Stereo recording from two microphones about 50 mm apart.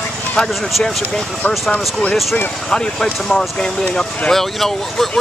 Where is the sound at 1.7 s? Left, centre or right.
Left.